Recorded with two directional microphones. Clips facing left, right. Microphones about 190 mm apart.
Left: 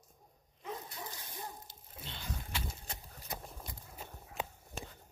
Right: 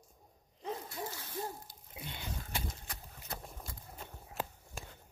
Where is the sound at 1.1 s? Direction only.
15° left (ahead or behind).